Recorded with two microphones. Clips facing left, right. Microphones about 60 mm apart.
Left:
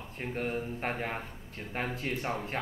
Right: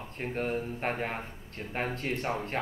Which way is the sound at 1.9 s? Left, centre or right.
Right.